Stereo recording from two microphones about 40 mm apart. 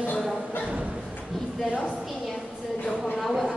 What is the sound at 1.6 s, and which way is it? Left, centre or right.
Speech, right.